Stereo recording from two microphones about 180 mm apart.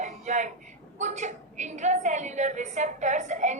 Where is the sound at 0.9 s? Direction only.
40° right (ahead or behind).